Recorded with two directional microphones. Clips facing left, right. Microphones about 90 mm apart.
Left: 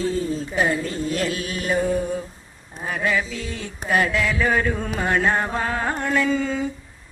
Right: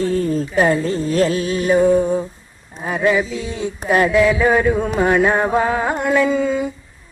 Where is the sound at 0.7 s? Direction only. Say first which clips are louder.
Right 6 dB; 30° right (ahead or behind).